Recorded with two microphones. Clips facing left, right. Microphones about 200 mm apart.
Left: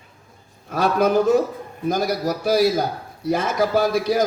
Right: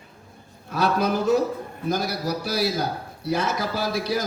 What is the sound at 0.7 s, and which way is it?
A man's voice, 50° left (ahead or behind).